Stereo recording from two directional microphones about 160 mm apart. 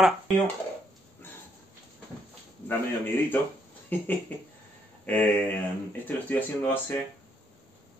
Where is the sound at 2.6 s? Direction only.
15° left (ahead or behind).